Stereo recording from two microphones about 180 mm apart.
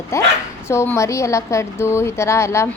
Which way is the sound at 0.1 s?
15° left (ahead or behind).